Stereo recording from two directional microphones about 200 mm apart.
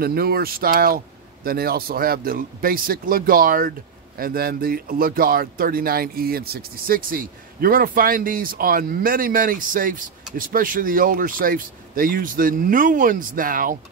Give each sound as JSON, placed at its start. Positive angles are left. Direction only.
{"t": 0.0, "sound": "speech", "side_deg": -50}